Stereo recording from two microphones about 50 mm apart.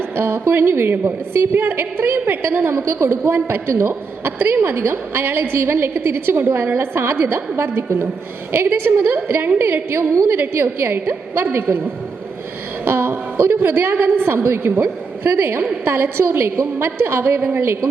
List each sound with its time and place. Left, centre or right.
0.2 s a woman's voice: right
2.7 s a woman's voice: right
10.3 s a woman's voice: right
12.8 s a woman's voice: right